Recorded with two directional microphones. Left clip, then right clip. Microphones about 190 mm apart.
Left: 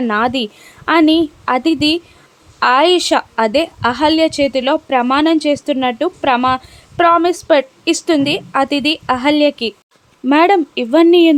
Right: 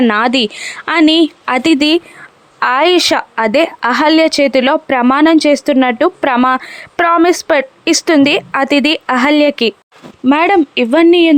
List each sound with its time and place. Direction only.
0.0 s a woman's voice: 30° right (ahead or behind)
10.2 s speech: 10° right (ahead or behind)